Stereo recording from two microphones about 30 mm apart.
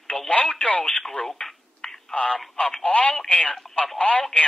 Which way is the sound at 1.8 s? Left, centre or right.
Centre.